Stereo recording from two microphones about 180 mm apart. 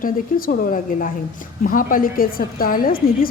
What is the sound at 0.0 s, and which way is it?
A woman's voice, 50° left (ahead or behind).